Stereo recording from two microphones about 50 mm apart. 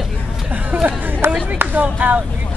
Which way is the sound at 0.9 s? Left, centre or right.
Right.